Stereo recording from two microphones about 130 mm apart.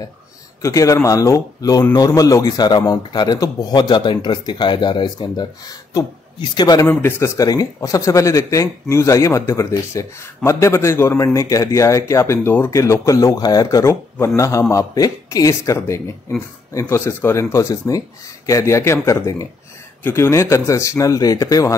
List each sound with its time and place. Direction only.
0.6 s a man's voice: 25° left (ahead or behind)
6.9 s a man's voice: 15° left (ahead or behind)